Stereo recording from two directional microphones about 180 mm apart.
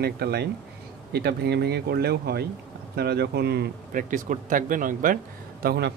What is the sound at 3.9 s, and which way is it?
Speech, 45° right (ahead or behind).